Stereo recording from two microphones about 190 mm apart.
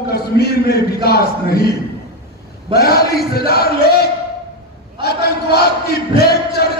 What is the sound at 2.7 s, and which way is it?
Speech, 55° left (ahead or behind).